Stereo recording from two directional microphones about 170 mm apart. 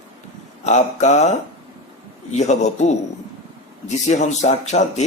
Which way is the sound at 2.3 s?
40° left (ahead or behind).